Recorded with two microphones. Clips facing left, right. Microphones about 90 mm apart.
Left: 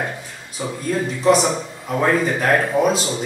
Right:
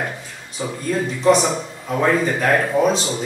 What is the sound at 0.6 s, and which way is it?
A man's voice, 5° left (ahead or behind).